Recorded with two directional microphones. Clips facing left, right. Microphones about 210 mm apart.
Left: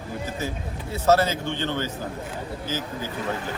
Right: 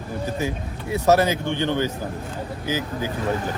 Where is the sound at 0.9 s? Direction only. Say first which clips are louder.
Right 2 dB; 15° right (ahead or behind).